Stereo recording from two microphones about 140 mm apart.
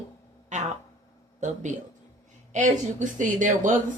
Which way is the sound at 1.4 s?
60° right (ahead or behind).